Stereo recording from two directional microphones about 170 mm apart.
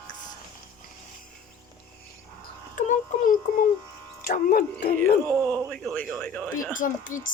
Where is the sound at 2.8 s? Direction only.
50° left (ahead or behind).